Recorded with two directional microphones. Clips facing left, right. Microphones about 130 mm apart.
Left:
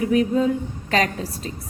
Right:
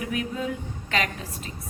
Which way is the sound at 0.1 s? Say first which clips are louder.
Left 12 dB; 35° left (ahead or behind).